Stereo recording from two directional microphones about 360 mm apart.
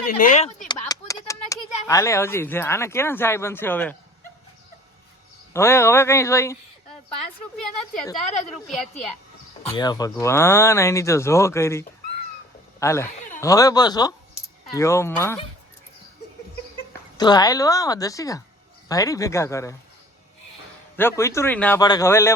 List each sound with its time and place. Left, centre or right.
0.2 s speech: centre
5.5 s speech: centre
8.4 s a woman's voice: centre
9.7 s speech: centre
17.2 s speech: centre
20.9 s speech: centre